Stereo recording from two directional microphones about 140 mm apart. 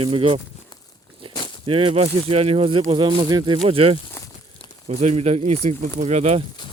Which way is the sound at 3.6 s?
45° right (ahead or behind).